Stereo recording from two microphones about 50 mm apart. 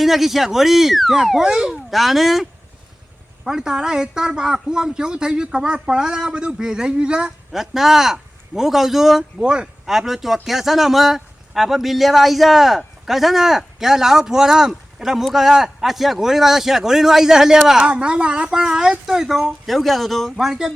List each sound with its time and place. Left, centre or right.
0.0 s a man's voice: centre
7.5 s speech: centre
9.4 s speech: centre
9.8 s a man's voice: centre
19.6 s a man's voice: centre
20.3 s speech: centre